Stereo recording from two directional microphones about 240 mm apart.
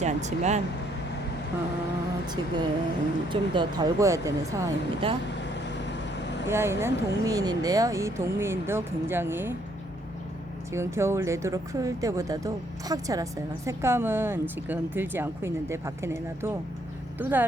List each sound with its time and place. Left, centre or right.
0.0 s speech: right
2.2 s speech: centre
5.4 s vehicle: left
6.5 s speech: centre
10.7 s speech: centre